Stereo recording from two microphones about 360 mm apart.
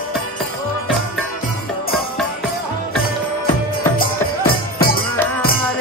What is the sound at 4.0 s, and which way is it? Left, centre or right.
Music, left.